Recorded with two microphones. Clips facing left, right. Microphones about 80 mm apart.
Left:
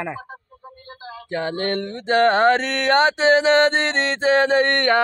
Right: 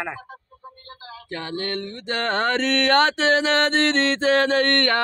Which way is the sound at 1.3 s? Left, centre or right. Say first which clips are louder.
Left 5 dB; left.